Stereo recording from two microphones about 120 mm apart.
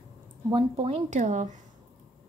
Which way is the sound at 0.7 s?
55° right (ahead or behind).